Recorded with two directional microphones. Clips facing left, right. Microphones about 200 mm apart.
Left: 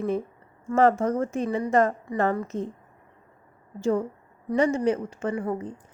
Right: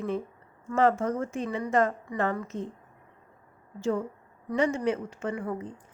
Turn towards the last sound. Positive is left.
turn(degrees=35)  # may be behind; listen again after turning